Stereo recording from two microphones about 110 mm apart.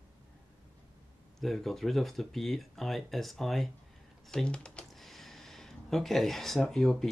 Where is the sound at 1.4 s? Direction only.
Centre (ahead or behind).